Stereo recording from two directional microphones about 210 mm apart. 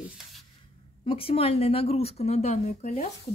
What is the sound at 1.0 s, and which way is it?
Speech, 25° left (ahead or behind).